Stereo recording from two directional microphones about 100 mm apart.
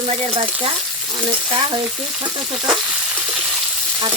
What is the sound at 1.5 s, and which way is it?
Speech, 50° right (ahead or behind).